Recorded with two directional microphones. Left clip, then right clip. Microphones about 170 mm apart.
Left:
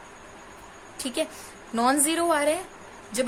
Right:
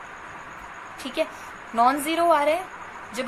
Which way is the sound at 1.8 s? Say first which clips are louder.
Right 3 dB; 70° left (ahead or behind).